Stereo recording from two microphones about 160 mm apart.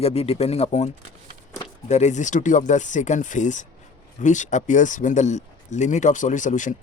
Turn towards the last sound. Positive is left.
turn(degrees=50)  # may be behind; listen again after turning